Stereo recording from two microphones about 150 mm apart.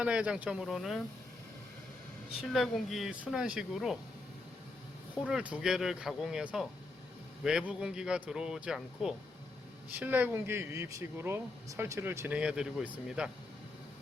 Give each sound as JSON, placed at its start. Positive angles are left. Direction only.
{"t": 0.0, "sound": "speech", "side_deg": -10}
{"t": 2.4, "sound": "speech", "side_deg": 0}
{"t": 5.2, "sound": "speech", "side_deg": -5}
{"t": 12.4, "sound": "speech", "side_deg": -5}